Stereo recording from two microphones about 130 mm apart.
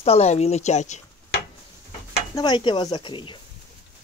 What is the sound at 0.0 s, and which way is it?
Speech, 55° left (ahead or behind).